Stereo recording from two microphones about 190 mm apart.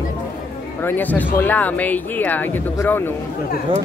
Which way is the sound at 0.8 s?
10° left (ahead or behind).